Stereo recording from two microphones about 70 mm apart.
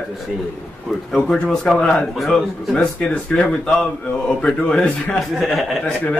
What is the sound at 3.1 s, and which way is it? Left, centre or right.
Speech, centre.